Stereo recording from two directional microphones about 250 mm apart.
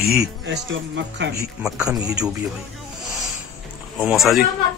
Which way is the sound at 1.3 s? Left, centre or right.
Centre.